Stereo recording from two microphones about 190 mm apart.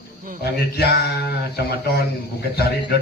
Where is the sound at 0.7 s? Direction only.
55° left (ahead or behind).